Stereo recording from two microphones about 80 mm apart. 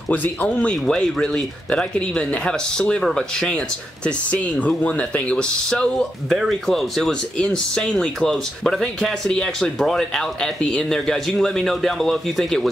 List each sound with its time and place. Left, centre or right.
0.1 s speech: centre
0.8 s speech: centre